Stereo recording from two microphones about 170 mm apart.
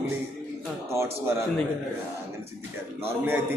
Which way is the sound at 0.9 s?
15° right (ahead or behind).